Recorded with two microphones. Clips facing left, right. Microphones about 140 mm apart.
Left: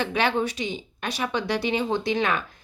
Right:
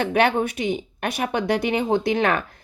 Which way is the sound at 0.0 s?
55° right (ahead or behind).